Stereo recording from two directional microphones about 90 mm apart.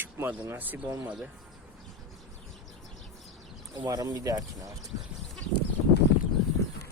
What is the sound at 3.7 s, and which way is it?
Speech, 45° right (ahead or behind).